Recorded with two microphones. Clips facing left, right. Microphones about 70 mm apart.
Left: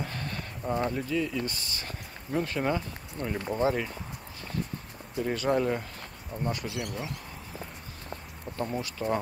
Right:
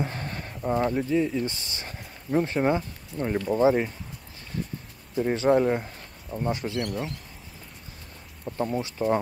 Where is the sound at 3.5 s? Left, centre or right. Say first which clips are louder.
Right 6 dB; centre.